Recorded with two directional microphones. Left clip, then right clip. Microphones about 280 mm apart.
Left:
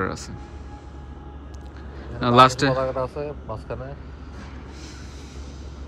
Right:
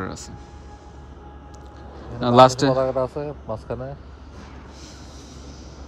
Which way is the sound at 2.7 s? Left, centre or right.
Right.